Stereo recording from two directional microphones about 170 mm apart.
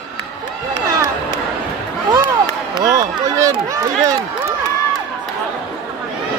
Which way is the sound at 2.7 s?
20° right (ahead or behind).